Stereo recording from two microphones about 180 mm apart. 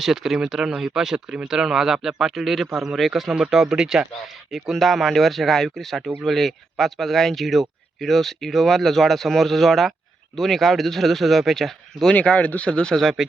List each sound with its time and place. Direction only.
0.0 s speech: centre (ahead or behind)